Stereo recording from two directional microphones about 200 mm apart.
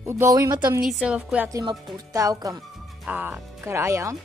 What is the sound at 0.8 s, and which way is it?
Speech, centre (ahead or behind).